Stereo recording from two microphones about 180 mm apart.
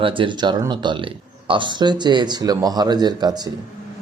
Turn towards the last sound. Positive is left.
turn(degrees=-20)  # may be behind; listen again after turning